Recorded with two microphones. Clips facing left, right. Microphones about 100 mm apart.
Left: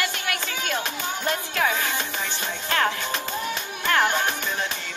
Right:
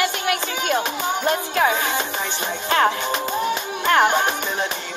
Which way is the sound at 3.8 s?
20° right (ahead or behind).